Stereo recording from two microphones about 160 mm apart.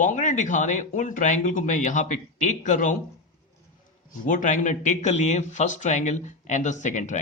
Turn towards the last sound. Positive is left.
turn(degrees=50)  # may be behind; listen again after turning